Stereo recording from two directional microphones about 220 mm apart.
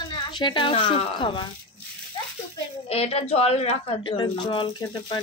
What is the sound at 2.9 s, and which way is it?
Speech, 30° left (ahead or behind).